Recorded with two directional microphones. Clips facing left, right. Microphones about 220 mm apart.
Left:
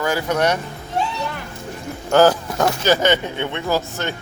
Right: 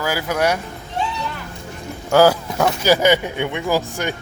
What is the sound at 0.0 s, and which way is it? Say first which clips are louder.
Speech: left 1 dB; 5° right (ahead or behind).